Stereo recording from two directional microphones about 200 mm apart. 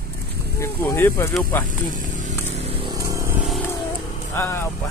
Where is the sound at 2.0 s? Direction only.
40° right (ahead or behind).